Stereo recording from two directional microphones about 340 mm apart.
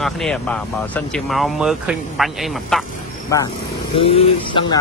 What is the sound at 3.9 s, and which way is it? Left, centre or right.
Speech, centre.